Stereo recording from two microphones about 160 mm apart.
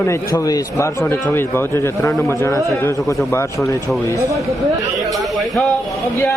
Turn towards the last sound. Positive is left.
turn(degrees=0)  # may be behind; listen again after turning